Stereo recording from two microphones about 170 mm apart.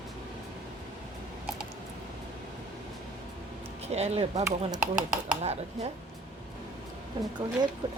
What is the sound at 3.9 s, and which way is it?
Speech, 40° right (ahead or behind).